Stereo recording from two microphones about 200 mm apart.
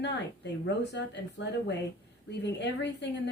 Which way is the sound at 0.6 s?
60° left (ahead or behind).